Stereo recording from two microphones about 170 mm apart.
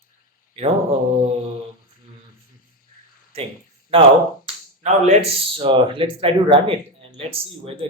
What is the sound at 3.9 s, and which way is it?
Speech, 30° right (ahead or behind).